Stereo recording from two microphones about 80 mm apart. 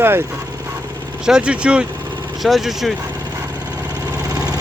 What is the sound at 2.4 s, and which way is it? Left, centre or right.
Speech, centre.